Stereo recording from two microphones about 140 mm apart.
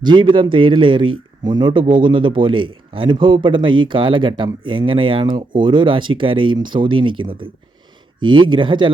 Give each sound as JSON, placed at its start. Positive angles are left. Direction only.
{"t": 0.0, "sound": "speech", "side_deg": -35}